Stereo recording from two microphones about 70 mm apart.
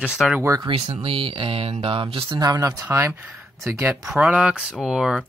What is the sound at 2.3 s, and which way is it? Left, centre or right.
Speech, right.